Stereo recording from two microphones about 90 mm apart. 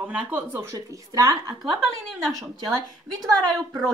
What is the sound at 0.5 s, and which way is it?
Speech, 30° right (ahead or behind).